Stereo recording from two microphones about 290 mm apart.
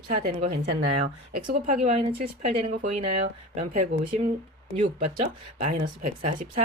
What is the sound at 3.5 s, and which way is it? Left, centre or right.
Speech, right.